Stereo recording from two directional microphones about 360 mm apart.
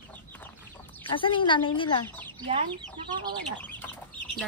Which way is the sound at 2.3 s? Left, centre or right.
Centre.